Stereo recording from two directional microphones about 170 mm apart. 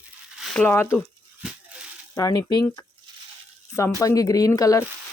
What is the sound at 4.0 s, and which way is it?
Speech, 20° left (ahead or behind).